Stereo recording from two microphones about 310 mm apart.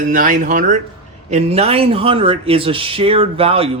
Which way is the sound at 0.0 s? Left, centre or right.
Right.